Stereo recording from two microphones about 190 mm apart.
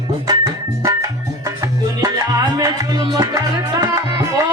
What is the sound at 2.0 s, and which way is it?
Music, 20° right (ahead or behind).